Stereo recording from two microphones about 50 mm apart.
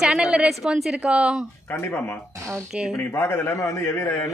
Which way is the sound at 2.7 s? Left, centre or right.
Centre.